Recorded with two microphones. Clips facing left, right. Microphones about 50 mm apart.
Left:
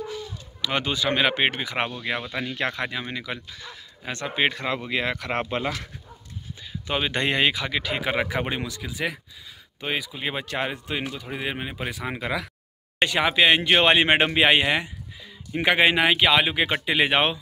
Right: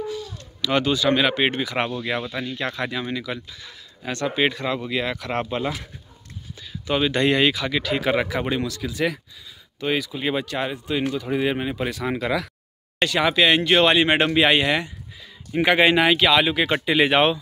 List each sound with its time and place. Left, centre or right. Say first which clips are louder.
0.6 s speech: right 5 dB; centre
3.4 s speech: left 1 dB; left
4.0 s speech: right 3 dB; left
10.4 s speech: right 1 dB; left
11.1 s speech: right 7 dB; centre
13.0 s speech: right 1 dB; left
15.5 s speech: right 3 dB; centre